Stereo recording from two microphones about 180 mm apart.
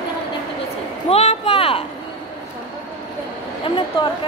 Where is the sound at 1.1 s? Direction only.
35° left (ahead or behind).